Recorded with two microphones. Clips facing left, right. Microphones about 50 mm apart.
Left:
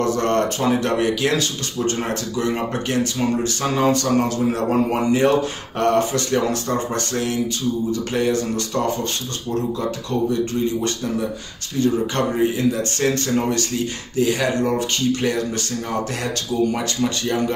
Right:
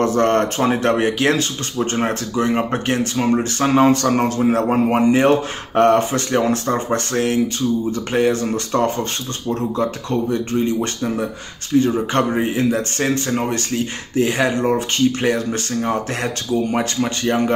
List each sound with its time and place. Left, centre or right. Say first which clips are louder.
0.0 s speech: right 3 dB; right
10.3 s speech: right 2 dB; right
13.0 s speech: left 2 dB; right